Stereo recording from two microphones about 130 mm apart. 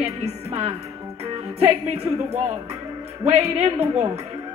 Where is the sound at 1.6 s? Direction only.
55° right (ahead or behind).